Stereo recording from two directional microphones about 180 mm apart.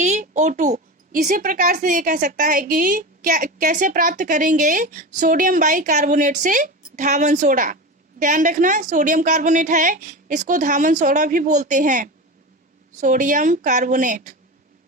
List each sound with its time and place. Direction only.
0.0 s a child's voice: 40° right (ahead or behind)